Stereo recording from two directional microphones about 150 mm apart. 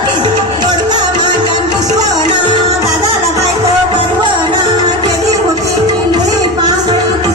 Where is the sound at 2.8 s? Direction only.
20° right (ahead or behind).